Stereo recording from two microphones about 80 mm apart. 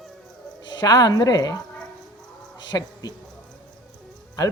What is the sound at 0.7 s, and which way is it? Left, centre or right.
Speech, left.